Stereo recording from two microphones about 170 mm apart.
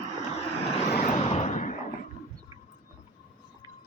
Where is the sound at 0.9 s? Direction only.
50° left (ahead or behind).